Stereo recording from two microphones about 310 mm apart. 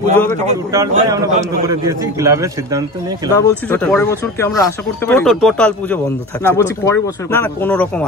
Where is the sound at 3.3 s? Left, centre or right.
Centre.